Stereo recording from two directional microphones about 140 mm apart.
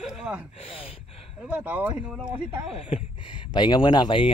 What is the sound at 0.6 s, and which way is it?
Speech, 45° left (ahead or behind).